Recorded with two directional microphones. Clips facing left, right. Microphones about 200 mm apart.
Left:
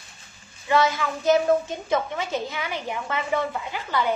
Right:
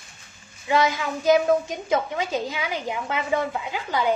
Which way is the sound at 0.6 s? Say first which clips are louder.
Even; 15° right (ahead or behind).